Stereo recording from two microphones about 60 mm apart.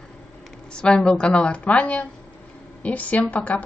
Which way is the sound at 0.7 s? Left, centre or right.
Centre.